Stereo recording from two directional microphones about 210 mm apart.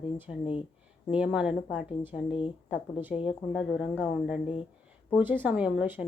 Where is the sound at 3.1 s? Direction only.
25° left (ahead or behind).